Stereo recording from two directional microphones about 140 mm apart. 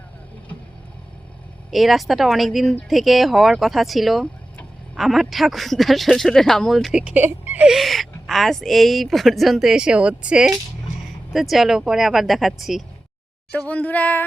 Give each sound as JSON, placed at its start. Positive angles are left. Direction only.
{"t": 1.7, "sound": "speech", "side_deg": 0}
{"t": 13.5, "sound": "speech", "side_deg": 10}